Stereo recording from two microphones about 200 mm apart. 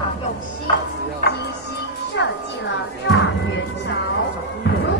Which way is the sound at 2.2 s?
60° left (ahead or behind).